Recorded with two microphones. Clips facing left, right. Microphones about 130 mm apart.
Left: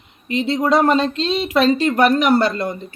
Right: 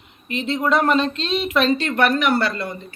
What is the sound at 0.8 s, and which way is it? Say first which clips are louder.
Speech: left 3 dB; 20° left (ahead or behind).